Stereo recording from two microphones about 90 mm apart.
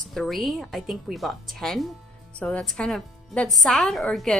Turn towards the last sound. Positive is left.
turn(degrees=5)  # may be behind; listen again after turning